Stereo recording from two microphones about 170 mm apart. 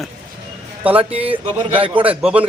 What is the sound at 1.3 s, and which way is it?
Speech, 30° right (ahead or behind).